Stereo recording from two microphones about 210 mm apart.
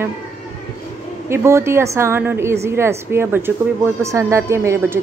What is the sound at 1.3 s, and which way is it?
A woman's voice, 10° right (ahead or behind).